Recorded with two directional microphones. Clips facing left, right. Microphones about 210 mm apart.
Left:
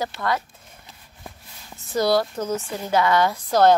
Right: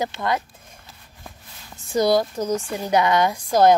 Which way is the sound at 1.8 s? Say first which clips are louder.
Right 2 dB; 15° right (ahead or behind).